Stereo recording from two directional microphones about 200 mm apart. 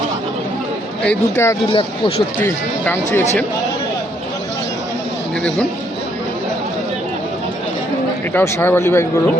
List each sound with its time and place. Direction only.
1.0 s speech: 10° left (ahead or behind)
1.7 s speech: 30° left (ahead or behind)
2.4 s speech: 10° left (ahead or behind)
8.3 s speech: 10° left (ahead or behind)